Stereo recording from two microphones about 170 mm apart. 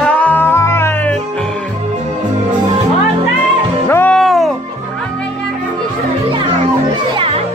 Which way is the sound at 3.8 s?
10° left (ahead or behind).